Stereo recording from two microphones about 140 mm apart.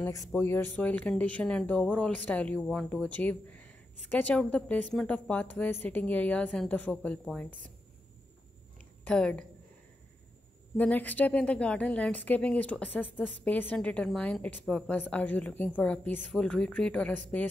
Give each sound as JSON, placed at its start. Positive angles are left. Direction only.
{"t": 0.3, "sound": "a woman's voice", "side_deg": 15}
{"t": 9.0, "sound": "a woman's voice", "side_deg": 5}
{"t": 10.8, "sound": "a woman's voice", "side_deg": 10}